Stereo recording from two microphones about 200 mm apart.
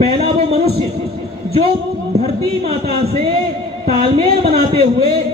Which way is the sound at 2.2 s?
30° right (ahead or behind).